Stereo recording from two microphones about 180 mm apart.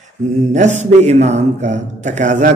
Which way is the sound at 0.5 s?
40° right (ahead or behind).